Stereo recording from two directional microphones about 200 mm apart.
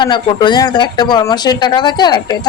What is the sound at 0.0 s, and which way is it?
Speech, 25° left (ahead or behind).